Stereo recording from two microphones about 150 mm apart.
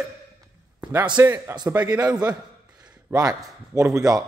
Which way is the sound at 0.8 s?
10° right (ahead or behind).